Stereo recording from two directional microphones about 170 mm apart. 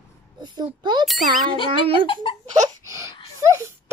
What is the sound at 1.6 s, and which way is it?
Speech, 30° right (ahead or behind).